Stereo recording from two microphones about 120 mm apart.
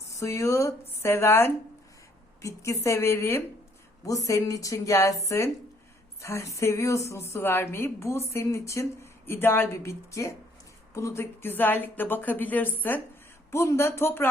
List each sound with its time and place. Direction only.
0.2 s a woman's voice: 25° left (ahead or behind)